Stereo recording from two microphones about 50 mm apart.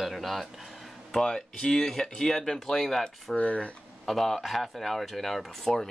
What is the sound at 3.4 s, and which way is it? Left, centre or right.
Speech, left.